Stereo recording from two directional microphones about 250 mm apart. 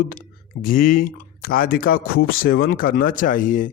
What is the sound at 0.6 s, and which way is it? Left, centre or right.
A man's voice, left.